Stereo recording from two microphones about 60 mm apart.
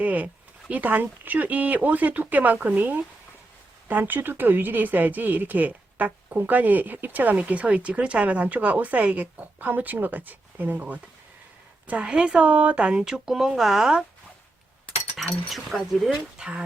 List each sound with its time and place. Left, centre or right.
0.0 s a sound: right
0.7 s speech: right; by 14.0 s centre
15.2 s speech: centre